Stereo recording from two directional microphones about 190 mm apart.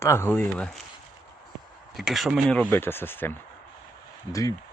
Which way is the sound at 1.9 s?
Centre (ahead or behind).